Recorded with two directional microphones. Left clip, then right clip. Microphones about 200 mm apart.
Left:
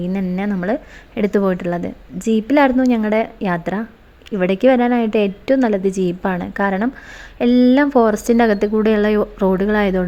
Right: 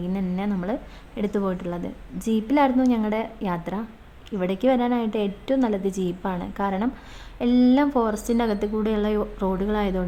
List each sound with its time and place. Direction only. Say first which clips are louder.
0.1 s a woman's voice: left 3 dB; 25° left (ahead or behind)